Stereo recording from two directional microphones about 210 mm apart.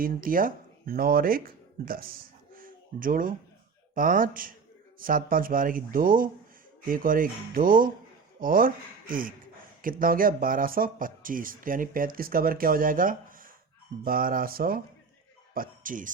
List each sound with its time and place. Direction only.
0.0 s speech: 40° right (ahead or behind)
2.6 s a sound: 40° right (ahead or behind)
3.9 s speech: 40° right (ahead or behind)